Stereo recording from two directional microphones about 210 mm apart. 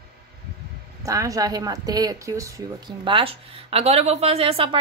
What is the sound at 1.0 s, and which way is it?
Speech, 15° right (ahead or behind).